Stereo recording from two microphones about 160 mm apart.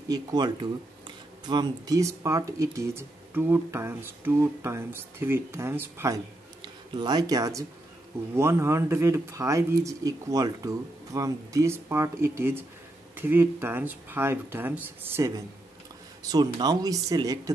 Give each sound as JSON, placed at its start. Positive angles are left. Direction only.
{"t": 0.1, "sound": "speech", "side_deg": -25}